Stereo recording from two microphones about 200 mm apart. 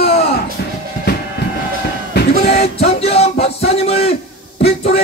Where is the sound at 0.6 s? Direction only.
55° left (ahead or behind).